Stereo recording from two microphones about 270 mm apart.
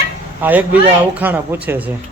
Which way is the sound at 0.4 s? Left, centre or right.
Centre.